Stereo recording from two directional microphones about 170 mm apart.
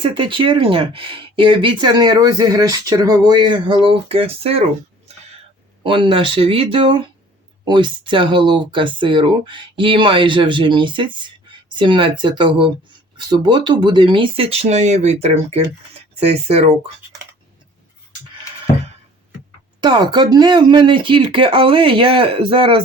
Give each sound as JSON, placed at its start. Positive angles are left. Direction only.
{"t": 0.0, "sound": "speech", "side_deg": -30}
{"t": 5.8, "sound": "speech", "side_deg": -30}
{"t": 19.8, "sound": "speech", "side_deg": -25}